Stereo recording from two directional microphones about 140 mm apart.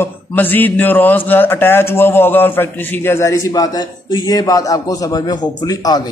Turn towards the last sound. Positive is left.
turn(degrees=25)  # may be behind; listen again after turning